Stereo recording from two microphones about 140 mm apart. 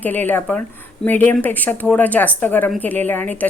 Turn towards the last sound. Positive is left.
turn(degrees=15)  # may be behind; listen again after turning